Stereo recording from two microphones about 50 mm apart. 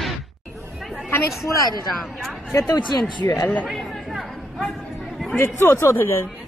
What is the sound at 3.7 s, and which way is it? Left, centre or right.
Chatter, centre.